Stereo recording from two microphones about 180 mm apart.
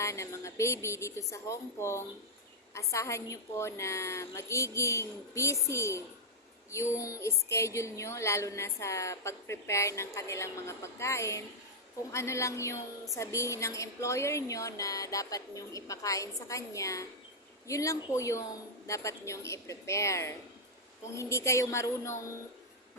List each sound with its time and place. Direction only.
0.0 s a woman's voice: 15° left (ahead or behind)